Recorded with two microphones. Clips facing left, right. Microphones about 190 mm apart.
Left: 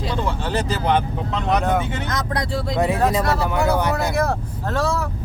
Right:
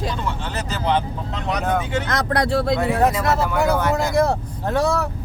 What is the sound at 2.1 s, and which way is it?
Speech, 70° right (ahead or behind).